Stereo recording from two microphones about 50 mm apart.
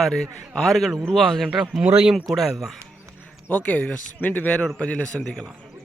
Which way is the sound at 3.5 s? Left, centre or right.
Left.